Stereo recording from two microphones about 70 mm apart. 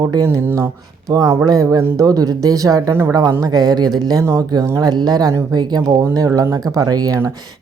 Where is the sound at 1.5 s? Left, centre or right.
Right.